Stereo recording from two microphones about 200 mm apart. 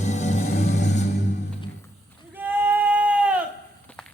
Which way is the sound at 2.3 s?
10° right (ahead or behind).